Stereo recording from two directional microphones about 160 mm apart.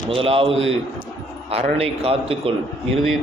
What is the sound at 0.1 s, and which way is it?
A man's voice, 35° right (ahead or behind).